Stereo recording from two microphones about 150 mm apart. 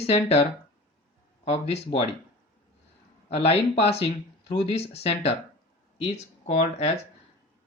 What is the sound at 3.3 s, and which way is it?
Speech, 40° left (ahead or behind).